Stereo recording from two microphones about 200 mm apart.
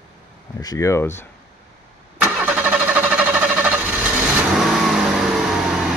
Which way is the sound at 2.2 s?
5° right (ahead or behind).